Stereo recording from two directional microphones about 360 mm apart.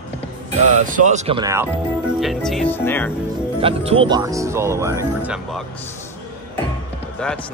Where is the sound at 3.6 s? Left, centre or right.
Centre.